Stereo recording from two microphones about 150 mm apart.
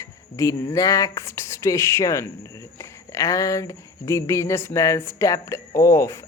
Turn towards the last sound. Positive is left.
turn(degrees=20)  # may be behind; listen again after turning